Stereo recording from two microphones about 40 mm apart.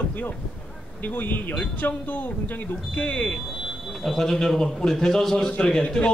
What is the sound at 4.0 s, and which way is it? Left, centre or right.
A man's voice, centre.